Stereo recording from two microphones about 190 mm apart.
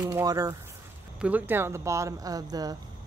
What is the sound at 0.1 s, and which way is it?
A woman's voice, 20° right (ahead or behind).